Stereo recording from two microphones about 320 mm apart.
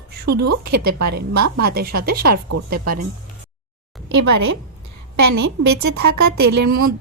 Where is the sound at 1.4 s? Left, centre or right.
Right.